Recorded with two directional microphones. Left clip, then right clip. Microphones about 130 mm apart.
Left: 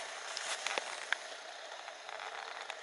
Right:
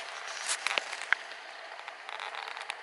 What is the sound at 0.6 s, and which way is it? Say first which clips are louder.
Walk: right 8 dB; 15° left (ahead or behind).